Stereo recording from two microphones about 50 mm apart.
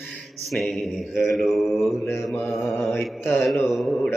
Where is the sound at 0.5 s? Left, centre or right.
Centre.